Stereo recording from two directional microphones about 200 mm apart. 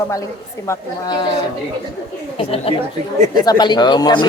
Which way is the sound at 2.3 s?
30° left (ahead or behind).